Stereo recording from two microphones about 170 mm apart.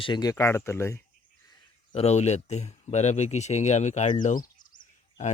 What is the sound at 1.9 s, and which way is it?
Speech, 40° left (ahead or behind).